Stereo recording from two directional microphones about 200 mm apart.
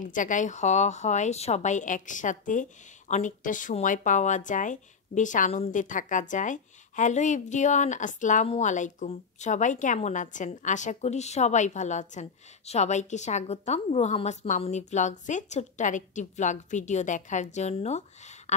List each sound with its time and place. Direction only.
0.0 s a woman's voice: 40° left (ahead or behind)